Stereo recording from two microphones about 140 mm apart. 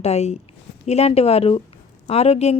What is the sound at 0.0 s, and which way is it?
A woman's voice, 50° left (ahead or behind).